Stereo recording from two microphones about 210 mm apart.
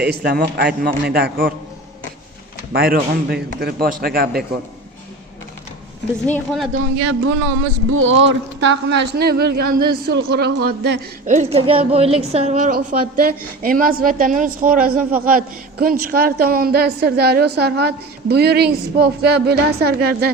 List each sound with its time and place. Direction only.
0.0 s a man's voice: 50° right (ahead or behind)
2.7 s a man's voice: 50° right (ahead or behind)
6.2 s a woman's voice: 5° left (ahead or behind)
7.9 s a man's voice: 75° right (ahead or behind); by 11.0 s 50° right (ahead or behind)
11.3 s a woman's voice: 30° right (ahead or behind); by 20.3 s 50° right (ahead or behind)